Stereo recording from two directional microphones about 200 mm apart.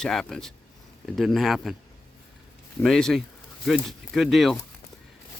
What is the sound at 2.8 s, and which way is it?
Speech, centre (ahead or behind).